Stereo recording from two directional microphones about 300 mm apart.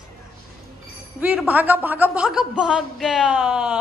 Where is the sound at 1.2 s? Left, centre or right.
Centre.